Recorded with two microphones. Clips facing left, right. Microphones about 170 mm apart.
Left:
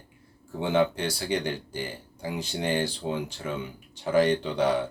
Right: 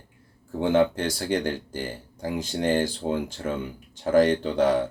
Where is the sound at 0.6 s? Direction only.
45° right (ahead or behind).